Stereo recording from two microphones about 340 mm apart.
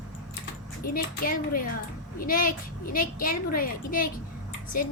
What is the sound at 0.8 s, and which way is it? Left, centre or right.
A woman's voice, left.